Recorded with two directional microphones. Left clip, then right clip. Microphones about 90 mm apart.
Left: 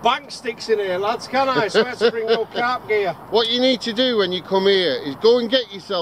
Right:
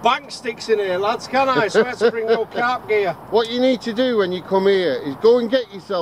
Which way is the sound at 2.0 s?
15° left (ahead or behind).